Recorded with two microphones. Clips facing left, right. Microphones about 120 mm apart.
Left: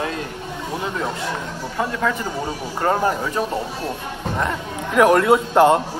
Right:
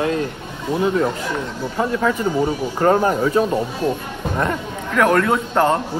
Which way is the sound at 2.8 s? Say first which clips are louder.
Right 4 dB; 35° right (ahead or behind).